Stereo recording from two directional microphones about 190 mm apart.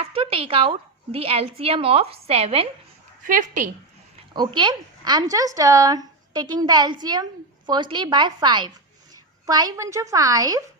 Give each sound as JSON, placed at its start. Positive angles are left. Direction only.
{"t": 0.0, "sound": "a woman's voice", "side_deg": -30}
{"t": 4.4, "sound": "a woman's voice", "side_deg": -25}